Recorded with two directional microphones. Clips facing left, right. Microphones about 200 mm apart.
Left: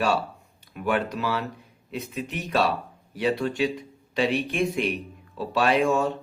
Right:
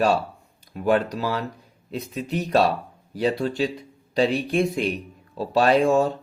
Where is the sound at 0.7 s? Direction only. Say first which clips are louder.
Right 5 dB; 35° right (ahead or behind).